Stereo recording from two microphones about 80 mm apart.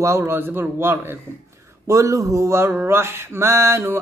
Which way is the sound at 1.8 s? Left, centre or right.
Right.